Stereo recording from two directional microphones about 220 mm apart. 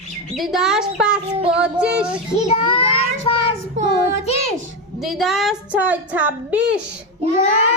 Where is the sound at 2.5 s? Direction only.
25° left (ahead or behind).